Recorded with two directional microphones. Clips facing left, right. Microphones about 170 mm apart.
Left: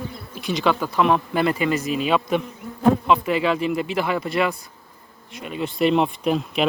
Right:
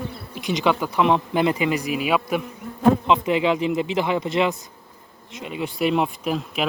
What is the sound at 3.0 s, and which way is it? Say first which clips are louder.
Bee: even; 20° right (ahead or behind).